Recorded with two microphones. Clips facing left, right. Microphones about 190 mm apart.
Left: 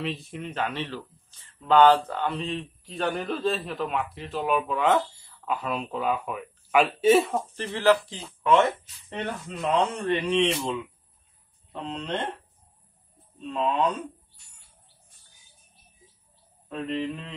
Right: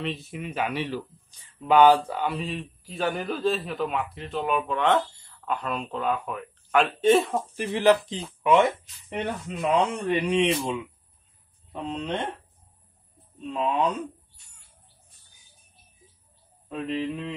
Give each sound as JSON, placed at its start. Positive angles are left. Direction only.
{"t": 0.0, "sound": "a man's voice", "side_deg": 0}
{"t": 7.5, "sound": "speech", "side_deg": -15}
{"t": 13.5, "sound": "speech", "side_deg": -10}
{"t": 16.6, "sound": "speech", "side_deg": -5}